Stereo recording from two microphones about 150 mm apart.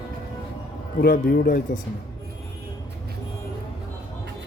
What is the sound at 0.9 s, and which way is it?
Speech, 85° left.